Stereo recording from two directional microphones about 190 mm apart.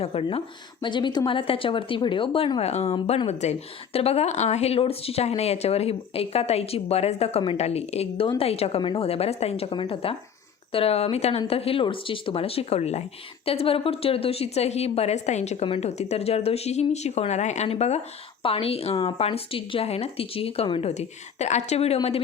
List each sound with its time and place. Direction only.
0.0 s a woman's voice: 30° left (ahead or behind)